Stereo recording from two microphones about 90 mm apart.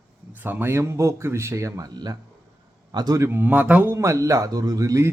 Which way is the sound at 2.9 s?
55° right (ahead or behind).